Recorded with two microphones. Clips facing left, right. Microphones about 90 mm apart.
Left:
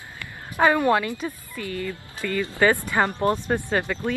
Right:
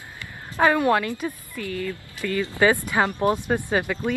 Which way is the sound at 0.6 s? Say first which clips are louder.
Even; centre (ahead or behind).